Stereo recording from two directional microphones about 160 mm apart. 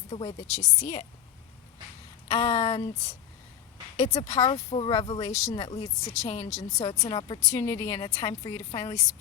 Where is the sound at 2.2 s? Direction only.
40° left (ahead or behind).